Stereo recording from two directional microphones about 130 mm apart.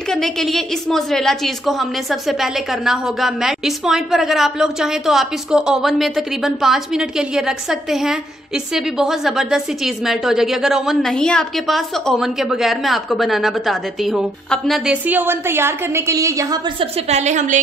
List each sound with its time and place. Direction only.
0.1 s a woman's voice: 5° left (ahead or behind)
15.0 s a woman's voice: 15° right (ahead or behind)
16.8 s a woman's voice: 55° right (ahead or behind)